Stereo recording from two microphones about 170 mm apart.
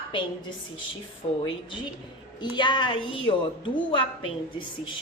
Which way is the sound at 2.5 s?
25° left (ahead or behind).